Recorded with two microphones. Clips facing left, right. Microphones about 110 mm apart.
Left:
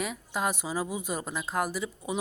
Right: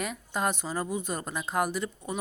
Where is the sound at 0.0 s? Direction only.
Centre (ahead or behind).